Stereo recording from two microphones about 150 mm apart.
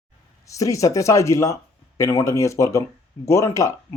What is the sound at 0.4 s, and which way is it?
Speech, 20° left (ahead or behind).